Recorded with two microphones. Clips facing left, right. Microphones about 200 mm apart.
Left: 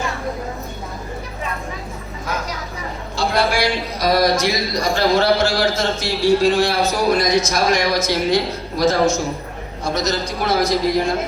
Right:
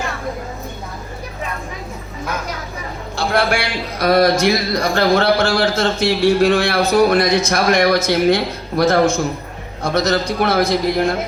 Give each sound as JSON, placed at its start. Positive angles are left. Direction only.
{"t": 3.2, "sound": "a man's voice", "side_deg": -55}